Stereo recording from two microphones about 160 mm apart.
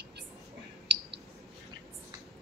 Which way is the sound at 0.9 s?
90° right.